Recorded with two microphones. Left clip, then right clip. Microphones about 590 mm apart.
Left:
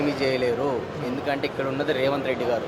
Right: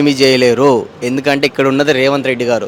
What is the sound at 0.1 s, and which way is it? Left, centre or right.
A man's voice, right.